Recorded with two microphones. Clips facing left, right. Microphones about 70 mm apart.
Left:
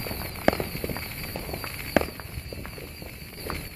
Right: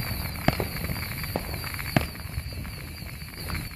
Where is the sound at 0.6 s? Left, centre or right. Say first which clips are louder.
Left 1 dB; right.